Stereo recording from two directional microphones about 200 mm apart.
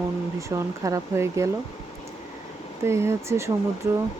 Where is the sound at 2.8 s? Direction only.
15° right (ahead or behind).